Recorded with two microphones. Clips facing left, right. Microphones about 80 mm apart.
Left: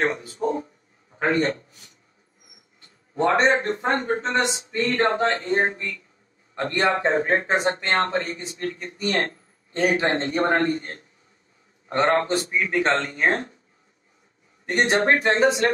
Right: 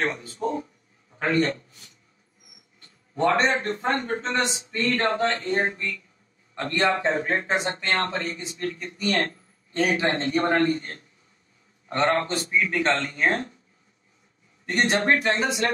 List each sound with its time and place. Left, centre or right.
0.0 s a sound: centre
1.1 s a man's voice: left
3.2 s a man's voice: left
14.7 s a man's voice: left